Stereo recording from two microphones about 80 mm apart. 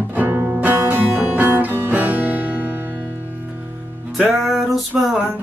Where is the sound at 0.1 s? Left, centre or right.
Right.